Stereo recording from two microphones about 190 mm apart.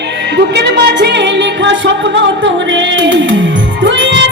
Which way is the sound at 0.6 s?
60° right (ahead or behind).